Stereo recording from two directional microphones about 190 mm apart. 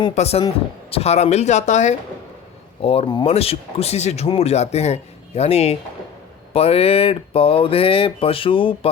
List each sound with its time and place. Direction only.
0.0 s speech: 35° left (ahead or behind)